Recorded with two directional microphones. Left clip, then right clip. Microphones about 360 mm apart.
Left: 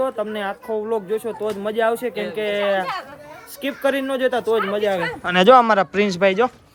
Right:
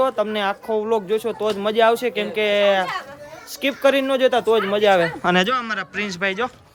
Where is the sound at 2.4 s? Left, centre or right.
Centre.